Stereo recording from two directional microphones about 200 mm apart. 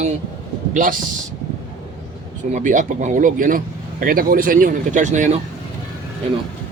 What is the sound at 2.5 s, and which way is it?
Speech, 40° right (ahead or behind).